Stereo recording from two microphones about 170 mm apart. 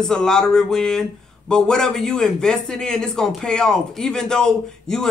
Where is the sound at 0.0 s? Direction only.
5° left (ahead or behind).